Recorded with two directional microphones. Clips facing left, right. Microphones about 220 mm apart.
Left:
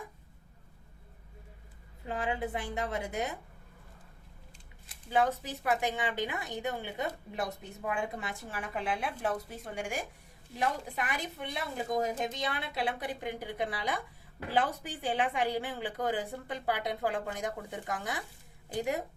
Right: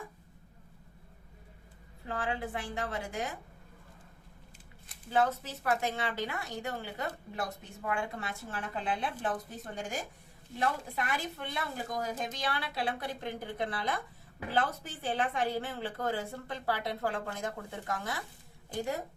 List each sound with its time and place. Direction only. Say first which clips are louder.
2.0 s a woman's voice: left 2 dB; 20° left (ahead or behind)
5.1 s speech: left 1 dB; 15° left (ahead or behind)
10.6 s a woman's voice: even; 15° left (ahead or behind)